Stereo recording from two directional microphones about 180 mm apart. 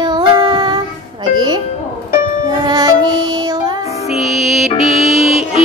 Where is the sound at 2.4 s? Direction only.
20° right (ahead or behind).